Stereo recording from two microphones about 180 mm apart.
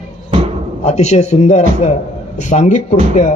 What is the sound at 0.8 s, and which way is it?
A man's voice, 35° left (ahead or behind).